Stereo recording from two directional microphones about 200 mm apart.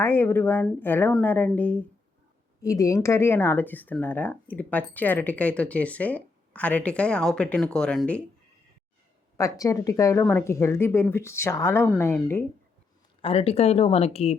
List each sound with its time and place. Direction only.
0.0 s speech: 10° left (ahead or behind)
9.4 s speech: 15° left (ahead or behind)
13.2 s speech: 30° left (ahead or behind)